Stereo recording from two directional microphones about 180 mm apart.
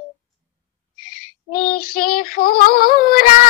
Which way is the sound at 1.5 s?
55° left (ahead or behind).